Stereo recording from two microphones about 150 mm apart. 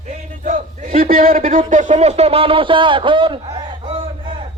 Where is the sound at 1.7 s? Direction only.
55° right (ahead or behind); by 4.3 s 35° right (ahead or behind).